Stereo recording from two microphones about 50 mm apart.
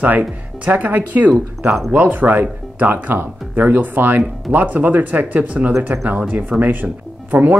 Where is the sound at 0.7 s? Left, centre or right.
Right.